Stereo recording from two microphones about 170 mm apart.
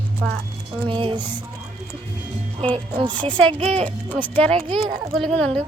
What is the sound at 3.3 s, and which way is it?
A child's voice, 5° left (ahead or behind).